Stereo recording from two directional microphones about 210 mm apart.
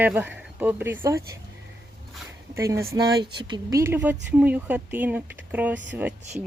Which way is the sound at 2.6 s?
15° right (ahead or behind).